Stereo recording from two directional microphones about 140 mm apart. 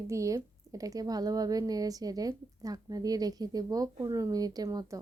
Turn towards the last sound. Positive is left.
turn(degrees=-25)  # may be behind; listen again after turning